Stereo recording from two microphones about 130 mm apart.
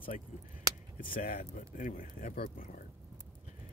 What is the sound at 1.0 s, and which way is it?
Speech, 90° left.